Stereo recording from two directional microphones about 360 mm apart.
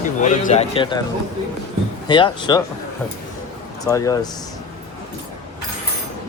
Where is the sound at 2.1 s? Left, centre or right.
Centre.